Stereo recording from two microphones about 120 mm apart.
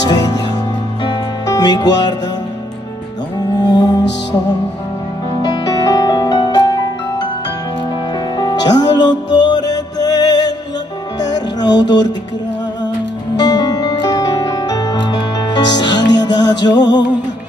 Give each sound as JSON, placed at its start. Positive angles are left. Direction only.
{"t": 1.0, "sound": "music", "side_deg": 35}
{"t": 3.3, "sound": "music", "side_deg": 35}
{"t": 5.4, "sound": "music", "side_deg": 30}
{"t": 8.4, "sound": "music", "side_deg": 35}
{"t": 13.4, "sound": "music", "side_deg": 35}